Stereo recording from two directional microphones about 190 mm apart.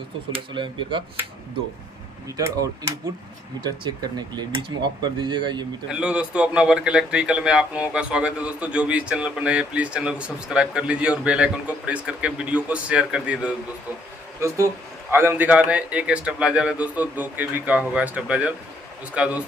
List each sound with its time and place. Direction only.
0.5 s speech: 25° right (ahead or behind)
3.9 s speech: 20° right (ahead or behind)
5.9 s a man's voice: 5° right (ahead or behind)